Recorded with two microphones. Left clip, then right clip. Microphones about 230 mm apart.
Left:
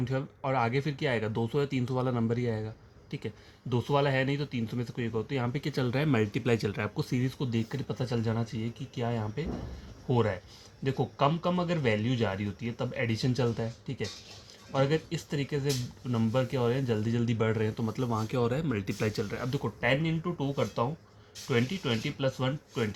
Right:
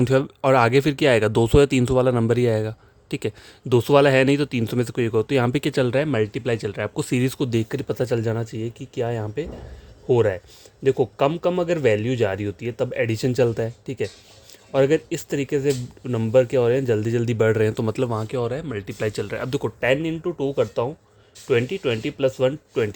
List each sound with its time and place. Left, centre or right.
0.0 s speech: right
6.9 s speech: right